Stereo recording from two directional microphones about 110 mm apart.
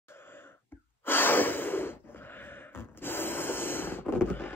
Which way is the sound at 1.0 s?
20° left (ahead or behind).